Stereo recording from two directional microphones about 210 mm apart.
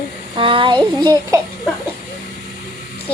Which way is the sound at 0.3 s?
25° right (ahead or behind).